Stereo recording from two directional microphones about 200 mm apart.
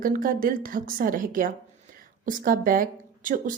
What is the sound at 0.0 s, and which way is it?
A woman's voice, 45° right (ahead or behind).